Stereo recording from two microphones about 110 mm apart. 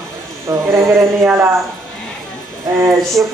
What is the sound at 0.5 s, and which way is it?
Speech, 25° right (ahead or behind).